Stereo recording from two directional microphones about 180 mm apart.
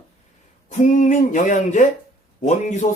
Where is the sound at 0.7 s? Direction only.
45° left (ahead or behind).